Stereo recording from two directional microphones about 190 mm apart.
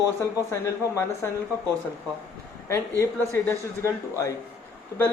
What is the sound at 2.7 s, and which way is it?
Speech, 15° left (ahead or behind).